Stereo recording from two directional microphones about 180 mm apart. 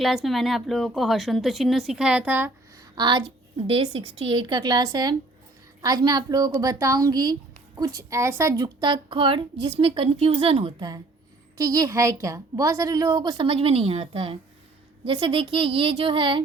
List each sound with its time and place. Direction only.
0.0 s speech: centre (ahead or behind)
2.9 s a woman's voice: 25° right (ahead or behind)